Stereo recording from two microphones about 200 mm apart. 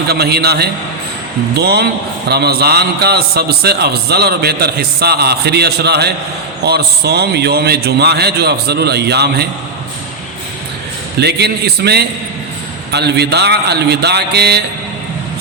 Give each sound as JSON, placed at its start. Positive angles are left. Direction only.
{"t": 0.1, "sound": "a man's voice", "side_deg": -55}
{"t": 11.2, "sound": "a man's voice", "side_deg": -55}